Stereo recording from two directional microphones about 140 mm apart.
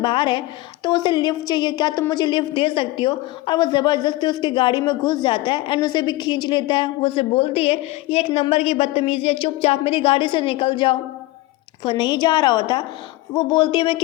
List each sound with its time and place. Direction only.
0.0 s a woman's voice: 35° left (ahead or behind)